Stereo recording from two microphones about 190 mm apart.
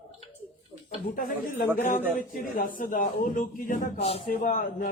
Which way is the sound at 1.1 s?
50° left (ahead or behind).